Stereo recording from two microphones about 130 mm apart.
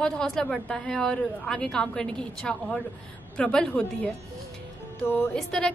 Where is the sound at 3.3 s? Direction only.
5° left (ahead or behind).